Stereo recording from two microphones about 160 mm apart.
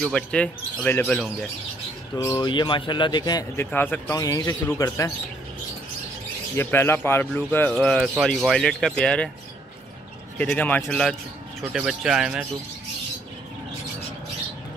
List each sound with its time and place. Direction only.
0.0 s speech: 5° left (ahead or behind)
2.3 s speech: 30° left (ahead or behind)
3.5 s speech: 15° left (ahead or behind)
6.5 s speech: 15° left (ahead or behind)
10.3 s speech: 10° left (ahead or behind)
11.7 s speech: 5° right (ahead or behind)